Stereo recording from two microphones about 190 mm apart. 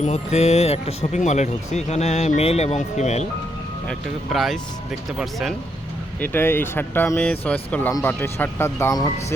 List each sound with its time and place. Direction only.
0.0 s speech: 35° left (ahead or behind)
3.8 s speech: centre (ahead or behind)
6.1 s speech: 10° left (ahead or behind)